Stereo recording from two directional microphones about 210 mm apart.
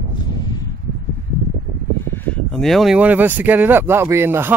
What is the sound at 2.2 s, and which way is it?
Speech, 5° left (ahead or behind).